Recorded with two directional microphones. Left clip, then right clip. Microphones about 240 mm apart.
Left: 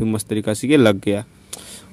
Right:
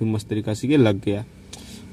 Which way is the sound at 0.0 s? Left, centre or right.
Left.